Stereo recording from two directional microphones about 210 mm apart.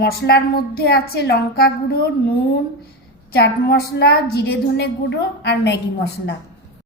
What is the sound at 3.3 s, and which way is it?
A woman's voice, 50° left (ahead or behind).